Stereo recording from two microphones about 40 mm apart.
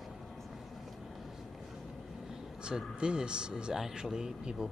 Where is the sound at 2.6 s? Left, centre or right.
Right.